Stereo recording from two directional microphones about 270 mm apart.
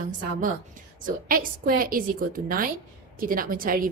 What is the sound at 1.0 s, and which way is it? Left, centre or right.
A woman's voice, right.